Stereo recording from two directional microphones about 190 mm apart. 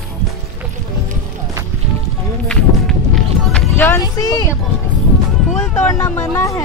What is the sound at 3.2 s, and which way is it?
Speech, centre (ahead or behind).